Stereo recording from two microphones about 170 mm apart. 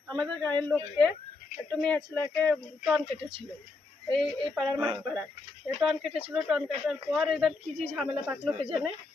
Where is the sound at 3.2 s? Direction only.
30° right (ahead or behind).